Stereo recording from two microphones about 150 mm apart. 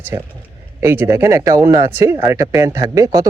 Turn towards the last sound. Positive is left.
turn(degrees=-20)  # may be behind; listen again after turning